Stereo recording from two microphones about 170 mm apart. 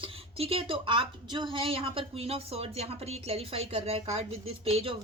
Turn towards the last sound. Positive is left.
turn(degrees=-35)  # may be behind; listen again after turning